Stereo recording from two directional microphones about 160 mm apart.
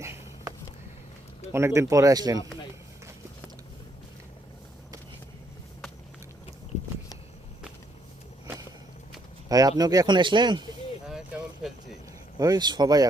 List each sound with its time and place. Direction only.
0.0 s a sound: 20° right (ahead or behind)
1.5 s speech: 15° right (ahead or behind)
9.5 s speech: 20° right (ahead or behind)
12.4 s speech: 25° right (ahead or behind)